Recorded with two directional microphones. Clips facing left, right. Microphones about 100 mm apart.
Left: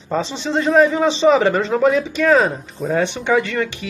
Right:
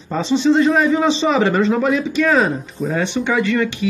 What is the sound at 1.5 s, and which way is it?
Speech, 30° left (ahead or behind).